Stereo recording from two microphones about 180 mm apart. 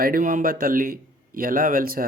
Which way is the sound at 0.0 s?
50° right (ahead or behind).